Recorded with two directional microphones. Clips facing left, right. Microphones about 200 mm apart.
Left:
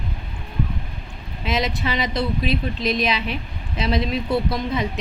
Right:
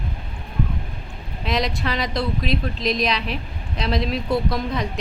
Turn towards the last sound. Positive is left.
turn(degrees=0)  # may be behind; listen again after turning